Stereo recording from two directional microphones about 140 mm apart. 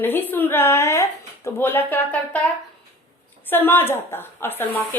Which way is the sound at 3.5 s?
15° left (ahead or behind).